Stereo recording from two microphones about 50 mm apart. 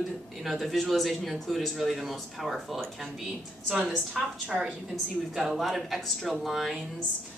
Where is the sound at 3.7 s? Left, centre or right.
Centre.